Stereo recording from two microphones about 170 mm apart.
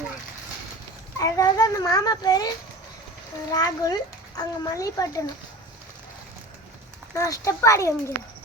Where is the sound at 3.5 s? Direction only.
20° left (ahead or behind).